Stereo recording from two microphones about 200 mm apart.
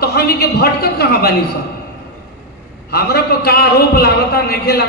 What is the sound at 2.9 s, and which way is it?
A man's voice, 50° left (ahead or behind).